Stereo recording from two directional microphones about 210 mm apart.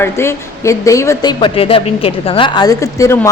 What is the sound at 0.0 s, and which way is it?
A woman's voice, 10° left (ahead or behind).